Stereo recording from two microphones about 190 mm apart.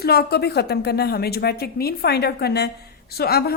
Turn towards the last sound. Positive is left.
turn(degrees=55)  # may be behind; listen again after turning